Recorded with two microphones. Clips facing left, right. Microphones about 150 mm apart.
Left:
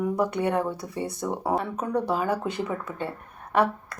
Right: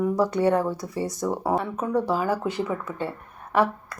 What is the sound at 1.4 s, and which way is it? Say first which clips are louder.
Speech: even; 25° right (ahead or behind).